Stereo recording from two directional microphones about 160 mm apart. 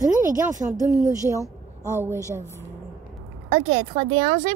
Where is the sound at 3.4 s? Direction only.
50° right (ahead or behind).